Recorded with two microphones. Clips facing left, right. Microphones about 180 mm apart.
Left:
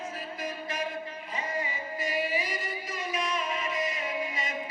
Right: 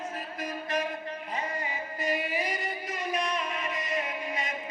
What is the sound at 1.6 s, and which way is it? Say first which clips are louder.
Music: right 2 dB; 55° right (ahead or behind).